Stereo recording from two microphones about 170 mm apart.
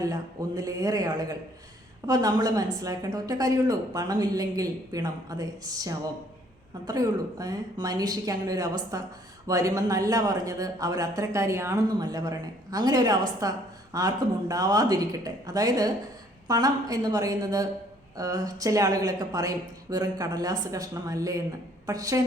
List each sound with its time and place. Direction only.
0.0 s speech: 20° right (ahead or behind)